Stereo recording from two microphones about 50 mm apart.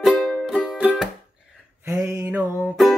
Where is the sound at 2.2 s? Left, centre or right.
Right.